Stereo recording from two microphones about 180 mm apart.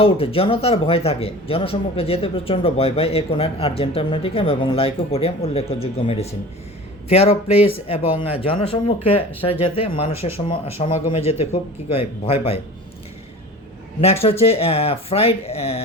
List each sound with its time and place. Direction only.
0.0 s speech: 30° left (ahead or behind)
14.0 s speech: 35° left (ahead or behind)